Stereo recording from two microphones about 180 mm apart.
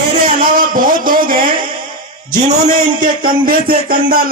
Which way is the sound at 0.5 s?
50° right (ahead or behind).